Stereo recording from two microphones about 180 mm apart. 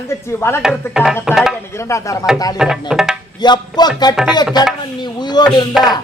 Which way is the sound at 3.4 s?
25° left (ahead or behind).